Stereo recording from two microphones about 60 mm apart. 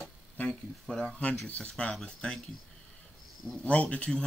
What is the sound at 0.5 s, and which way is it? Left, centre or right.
Speech, centre.